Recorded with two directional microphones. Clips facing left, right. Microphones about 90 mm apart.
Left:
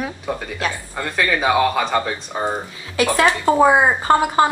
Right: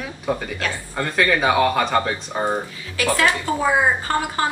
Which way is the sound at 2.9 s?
25° left (ahead or behind).